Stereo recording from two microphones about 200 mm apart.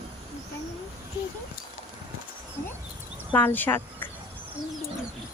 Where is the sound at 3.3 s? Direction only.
10° left (ahead or behind).